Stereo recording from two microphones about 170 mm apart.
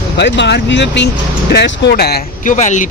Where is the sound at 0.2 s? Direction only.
90° left; by 2.2 s 70° left (ahead or behind).